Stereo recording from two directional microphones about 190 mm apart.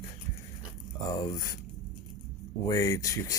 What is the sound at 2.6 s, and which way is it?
Speech, 15° left (ahead or behind).